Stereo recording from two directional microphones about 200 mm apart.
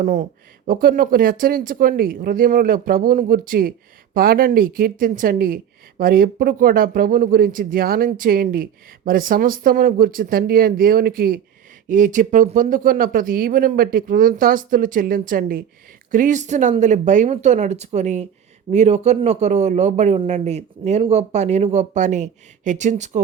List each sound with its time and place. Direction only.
0.0 s a man's voice: 35° right (ahead or behind)